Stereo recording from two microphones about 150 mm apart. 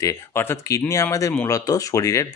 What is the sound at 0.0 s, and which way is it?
Speech, 20° left (ahead or behind).